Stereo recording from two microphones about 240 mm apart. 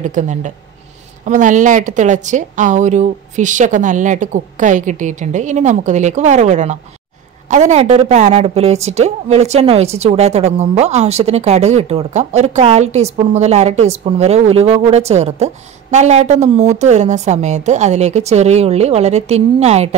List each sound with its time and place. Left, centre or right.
0.0 s a woman's voice: right